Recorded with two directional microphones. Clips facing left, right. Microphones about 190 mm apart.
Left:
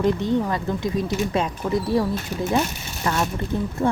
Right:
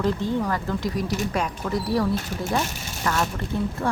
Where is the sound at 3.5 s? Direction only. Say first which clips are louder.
Even; 20° left (ahead or behind).